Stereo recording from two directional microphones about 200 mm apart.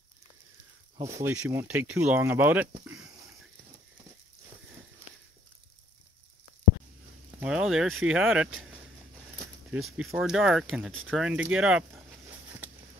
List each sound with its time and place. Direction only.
0.9 s speech: 20° right (ahead or behind)
7.2 s speech: 5° right (ahead or behind)
11.1 s a sound: 5° right (ahead or behind)